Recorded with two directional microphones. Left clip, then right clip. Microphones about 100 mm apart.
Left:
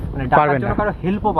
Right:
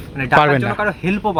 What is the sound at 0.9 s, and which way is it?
Speech, 60° right (ahead or behind).